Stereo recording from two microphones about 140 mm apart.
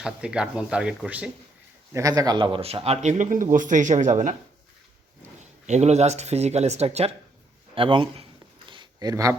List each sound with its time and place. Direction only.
0.0 s speech: 5° right (ahead or behind)
1.9 s speech: 25° right (ahead or behind); by 4.4 s 60° right (ahead or behind)
5.4 s speech: 55° right (ahead or behind)
7.8 s a sound: 40° right (ahead or behind)